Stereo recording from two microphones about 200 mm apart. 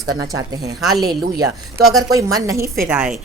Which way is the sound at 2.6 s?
50° right (ahead or behind).